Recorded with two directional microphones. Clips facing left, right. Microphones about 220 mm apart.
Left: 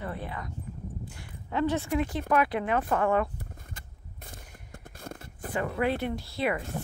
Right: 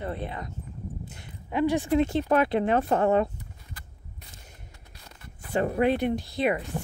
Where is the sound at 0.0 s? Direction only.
25° right (ahead or behind).